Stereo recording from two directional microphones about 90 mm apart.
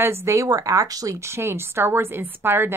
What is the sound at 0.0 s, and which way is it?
Speech, 30° right (ahead or behind).